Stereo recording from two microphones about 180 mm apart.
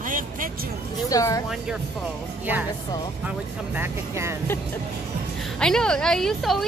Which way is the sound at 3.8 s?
15° right (ahead or behind).